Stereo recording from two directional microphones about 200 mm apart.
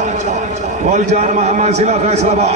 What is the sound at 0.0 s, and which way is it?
A man's voice, 35° right (ahead or behind).